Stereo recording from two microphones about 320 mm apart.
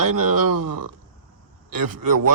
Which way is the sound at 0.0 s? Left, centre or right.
Right.